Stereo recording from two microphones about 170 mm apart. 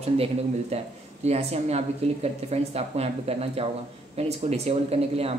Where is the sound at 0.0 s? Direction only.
40° right (ahead or behind).